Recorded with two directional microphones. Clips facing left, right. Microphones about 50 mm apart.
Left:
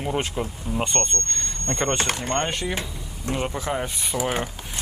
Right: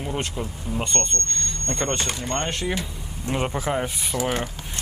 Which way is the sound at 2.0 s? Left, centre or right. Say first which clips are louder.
Left 3 dB; left.